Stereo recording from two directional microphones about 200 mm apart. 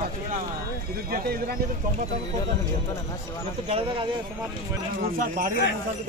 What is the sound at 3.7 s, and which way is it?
Speech, 30° right (ahead or behind).